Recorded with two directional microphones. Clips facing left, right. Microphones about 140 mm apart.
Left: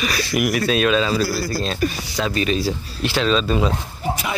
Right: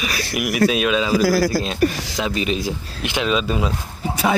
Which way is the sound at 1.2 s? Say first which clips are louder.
Right 6 dB; 90° right.